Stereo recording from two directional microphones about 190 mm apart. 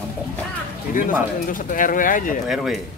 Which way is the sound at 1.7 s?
45° left (ahead or behind).